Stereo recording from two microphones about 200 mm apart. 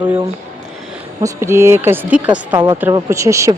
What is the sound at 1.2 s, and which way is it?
Speech, 15° right (ahead or behind).